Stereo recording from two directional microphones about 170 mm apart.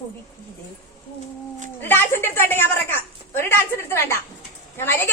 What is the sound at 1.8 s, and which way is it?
A woman's voice, 15° left (ahead or behind).